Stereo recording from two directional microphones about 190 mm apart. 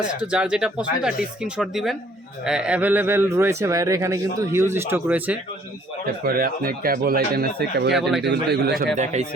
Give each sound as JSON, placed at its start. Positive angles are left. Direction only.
{"t": 0.2, "sound": "speech", "side_deg": -5}
{"t": 6.2, "sound": "speech", "side_deg": -50}
{"t": 7.9, "sound": "speech", "side_deg": 0}
{"t": 8.2, "sound": "a man's voice", "side_deg": -60}
{"t": 9.1, "sound": "speech", "side_deg": -35}